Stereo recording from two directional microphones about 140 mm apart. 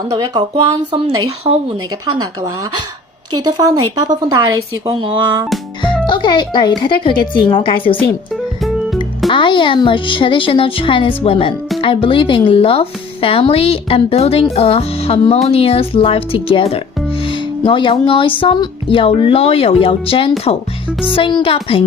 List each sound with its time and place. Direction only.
0.1 s speech: 30° right (ahead or behind)
1.5 s speech: 30° right (ahead or behind)
3.3 s speech: 25° right (ahead or behind)
5.8 s speech: 35° left (ahead or behind)
8.3 s music: centre (ahead or behind)
9.3 s speech: 35° left (ahead or behind)